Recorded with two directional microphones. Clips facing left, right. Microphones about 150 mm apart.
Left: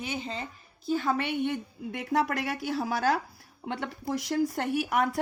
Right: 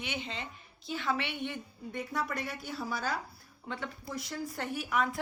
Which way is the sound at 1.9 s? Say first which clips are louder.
Left 7 dB; 90° left.